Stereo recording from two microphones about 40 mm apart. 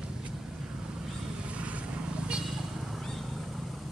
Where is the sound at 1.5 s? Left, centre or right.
Right.